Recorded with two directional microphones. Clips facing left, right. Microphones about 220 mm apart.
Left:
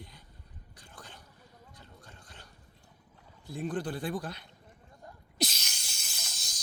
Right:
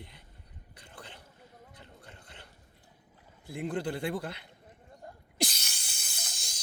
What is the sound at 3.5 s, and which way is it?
Speech, 25° right (ahead or behind).